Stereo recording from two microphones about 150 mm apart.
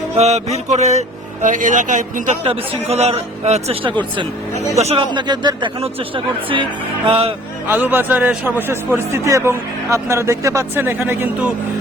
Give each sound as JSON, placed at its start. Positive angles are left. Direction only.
{"t": 0.2, "sound": "speech", "side_deg": -45}
{"t": 2.4, "sound": "a man's voice", "side_deg": -40}
{"t": 4.8, "sound": "speech", "side_deg": -45}
{"t": 5.1, "sound": "a man's voice", "side_deg": -30}
{"t": 7.7, "sound": "a man's voice", "side_deg": -15}